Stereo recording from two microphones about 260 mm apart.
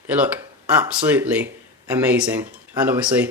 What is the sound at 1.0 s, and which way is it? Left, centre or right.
Speech, centre.